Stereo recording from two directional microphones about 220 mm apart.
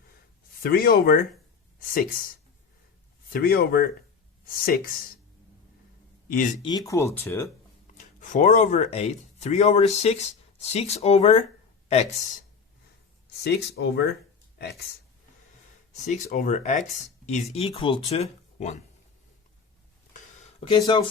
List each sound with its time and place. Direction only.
0.6 s speech: 40° left (ahead or behind)
3.2 s speech: 45° left (ahead or behind)
6.2 s speech: 40° left (ahead or behind)
6.6 s speech: 20° left (ahead or behind)
7.9 s speech: 35° left (ahead or behind)
13.4 s speech: 50° left (ahead or behind)
16.0 s speech: 35° left (ahead or behind)
20.6 s speech: 20° left (ahead or behind)